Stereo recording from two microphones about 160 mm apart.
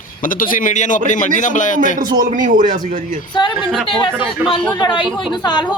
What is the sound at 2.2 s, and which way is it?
Speech, 50° right (ahead or behind).